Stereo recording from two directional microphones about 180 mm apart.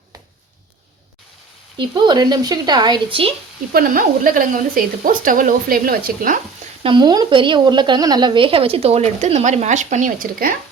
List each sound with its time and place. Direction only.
1.8 s speech: 25° right (ahead or behind)
3.7 s speech: 55° right (ahead or behind)
6.8 s a woman's voice: 25° right (ahead or behind); by 10.5 s 50° right (ahead or behind)